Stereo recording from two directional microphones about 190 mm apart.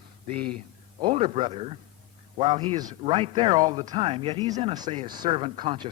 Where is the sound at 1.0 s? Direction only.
30° right (ahead or behind).